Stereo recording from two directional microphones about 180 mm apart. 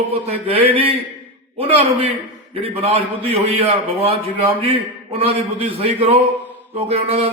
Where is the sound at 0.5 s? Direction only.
30° right (ahead or behind).